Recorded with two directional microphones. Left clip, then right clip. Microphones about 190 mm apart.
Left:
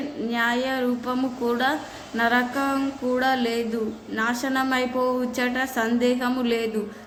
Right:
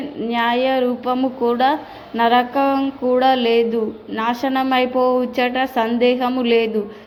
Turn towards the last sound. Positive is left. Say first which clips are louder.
# right 8 dB
turn(degrees=-20)  # may be behind; listen again after turning